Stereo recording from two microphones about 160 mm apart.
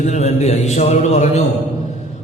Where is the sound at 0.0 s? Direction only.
45° left (ahead or behind).